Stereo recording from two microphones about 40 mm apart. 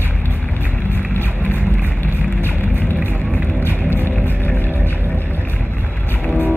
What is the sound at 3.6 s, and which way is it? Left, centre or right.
Music, left.